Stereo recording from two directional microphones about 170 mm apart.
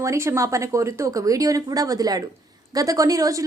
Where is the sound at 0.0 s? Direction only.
15° right (ahead or behind).